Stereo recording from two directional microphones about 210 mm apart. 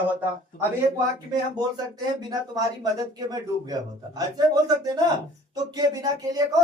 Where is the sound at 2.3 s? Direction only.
15° right (ahead or behind).